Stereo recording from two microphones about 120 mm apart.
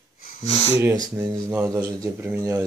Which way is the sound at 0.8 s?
25° right (ahead or behind).